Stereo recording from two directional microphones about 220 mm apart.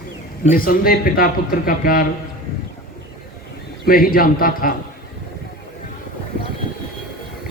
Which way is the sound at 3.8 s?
40° left (ahead or behind).